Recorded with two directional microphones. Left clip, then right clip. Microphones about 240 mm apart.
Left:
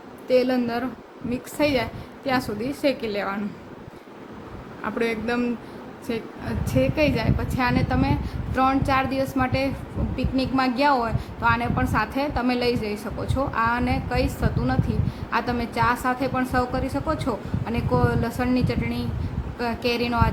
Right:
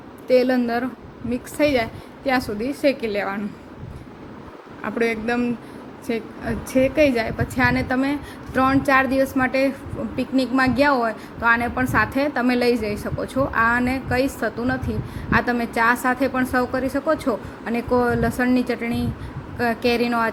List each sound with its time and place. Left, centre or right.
0.3 s a woman's voice: centre
4.8 s a woman's voice: centre